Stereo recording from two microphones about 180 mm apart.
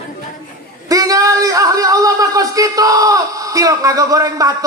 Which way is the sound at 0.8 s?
20° right (ahead or behind).